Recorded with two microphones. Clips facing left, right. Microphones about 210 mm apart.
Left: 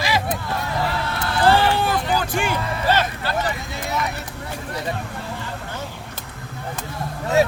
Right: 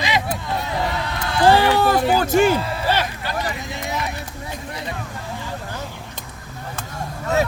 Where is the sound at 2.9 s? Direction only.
15° right (ahead or behind).